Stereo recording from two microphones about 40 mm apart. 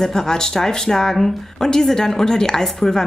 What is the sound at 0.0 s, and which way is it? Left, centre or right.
A woman's voice, centre.